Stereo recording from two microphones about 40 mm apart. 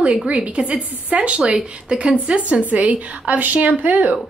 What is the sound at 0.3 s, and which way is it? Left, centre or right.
A woman's voice, right.